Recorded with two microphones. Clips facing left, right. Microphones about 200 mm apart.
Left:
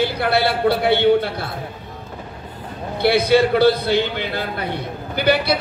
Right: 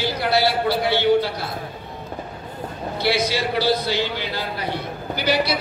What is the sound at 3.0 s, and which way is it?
A man's voice, 55° left (ahead or behind).